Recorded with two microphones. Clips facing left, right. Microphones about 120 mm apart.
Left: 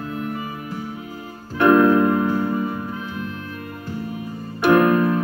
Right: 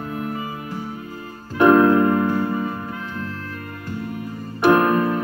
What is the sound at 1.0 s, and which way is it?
Music, 15° left (ahead or behind).